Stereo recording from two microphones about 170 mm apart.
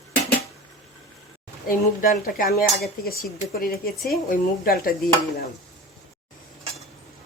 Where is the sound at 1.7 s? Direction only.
55° left (ahead or behind).